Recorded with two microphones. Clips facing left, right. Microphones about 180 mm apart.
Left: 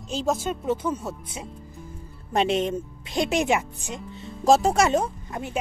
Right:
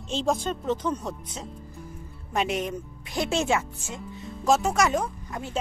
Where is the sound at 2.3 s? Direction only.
30° left (ahead or behind).